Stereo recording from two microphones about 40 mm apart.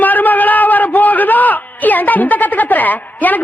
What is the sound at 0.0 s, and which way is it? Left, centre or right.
A man's voice, left.